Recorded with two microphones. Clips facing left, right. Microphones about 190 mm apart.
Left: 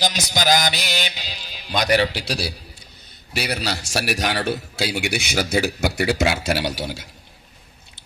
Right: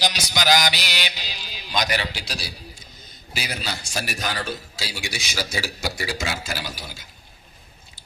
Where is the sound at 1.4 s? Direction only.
55° left (ahead or behind).